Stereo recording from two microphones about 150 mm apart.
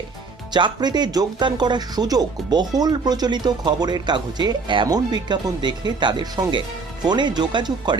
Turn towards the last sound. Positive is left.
turn(degrees=-30)  # may be behind; listen again after turning